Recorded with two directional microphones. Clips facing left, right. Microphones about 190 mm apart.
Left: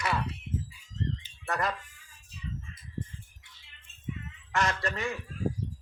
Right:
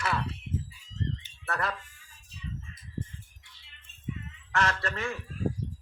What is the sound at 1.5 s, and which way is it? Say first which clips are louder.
Speech: left 1 dB; 15° left (ahead or behind).